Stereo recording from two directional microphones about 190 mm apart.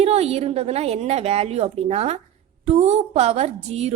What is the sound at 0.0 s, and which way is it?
Speech, 35° right (ahead or behind).